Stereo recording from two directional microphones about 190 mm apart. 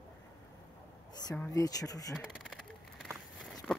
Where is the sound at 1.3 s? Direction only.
15° left (ahead or behind).